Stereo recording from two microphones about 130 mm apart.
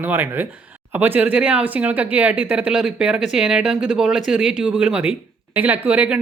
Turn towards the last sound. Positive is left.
turn(degrees=-10)  # may be behind; listen again after turning